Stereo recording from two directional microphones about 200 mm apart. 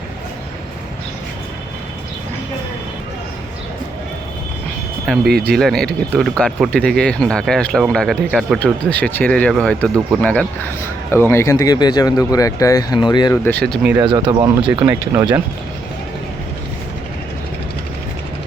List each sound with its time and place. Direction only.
5.0 s speech: centre (ahead or behind)
14.0 s speech: 25° right (ahead or behind)